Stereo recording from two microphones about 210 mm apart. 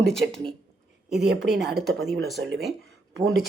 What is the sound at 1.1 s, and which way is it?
Speech, 55° right (ahead or behind).